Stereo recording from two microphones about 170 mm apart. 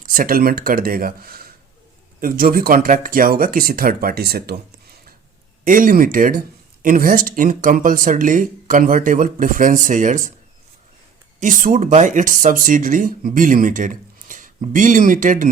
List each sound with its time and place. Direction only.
0.0 s speech: 55° right (ahead or behind)
5.6 s speech: 50° right (ahead or behind)
11.3 s speech: 50° right (ahead or behind)